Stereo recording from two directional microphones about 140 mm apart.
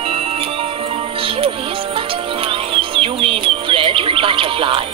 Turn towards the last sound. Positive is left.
turn(degrees=-40)  # may be behind; listen again after turning